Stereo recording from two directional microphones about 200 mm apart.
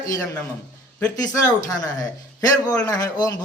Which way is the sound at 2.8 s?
20° left (ahead or behind).